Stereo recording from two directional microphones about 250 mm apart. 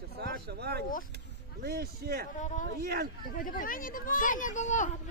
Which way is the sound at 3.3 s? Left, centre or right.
Left.